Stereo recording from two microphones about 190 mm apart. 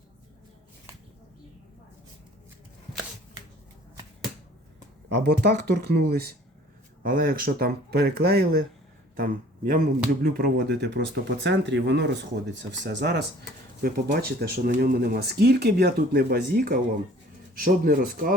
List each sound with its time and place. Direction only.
5.1 s speech: 60° right (ahead or behind)
9.1 s speech: 45° right (ahead or behind)